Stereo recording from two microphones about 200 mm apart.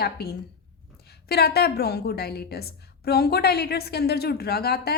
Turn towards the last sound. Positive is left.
turn(degrees=50)  # may be behind; listen again after turning